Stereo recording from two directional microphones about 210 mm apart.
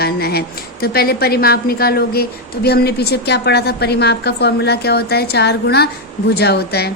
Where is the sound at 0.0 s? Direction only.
50° left (ahead or behind).